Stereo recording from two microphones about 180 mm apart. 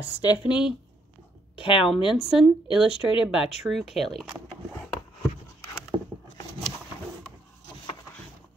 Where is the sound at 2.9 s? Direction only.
30° left (ahead or behind).